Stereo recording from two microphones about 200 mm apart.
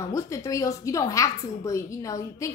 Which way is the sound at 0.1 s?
15° left (ahead or behind).